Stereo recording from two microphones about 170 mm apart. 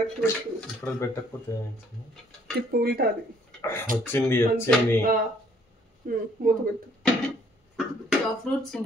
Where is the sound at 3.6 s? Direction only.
15° left (ahead or behind).